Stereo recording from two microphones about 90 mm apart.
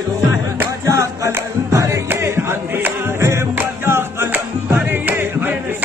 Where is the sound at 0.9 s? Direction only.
35° right (ahead or behind).